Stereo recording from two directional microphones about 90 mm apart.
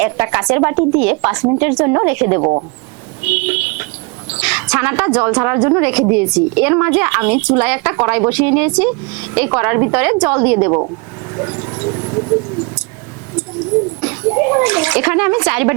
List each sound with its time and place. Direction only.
0.0 s a woman's voice: 20° right (ahead or behind)
14.0 s a child's voice: 25° right (ahead or behind)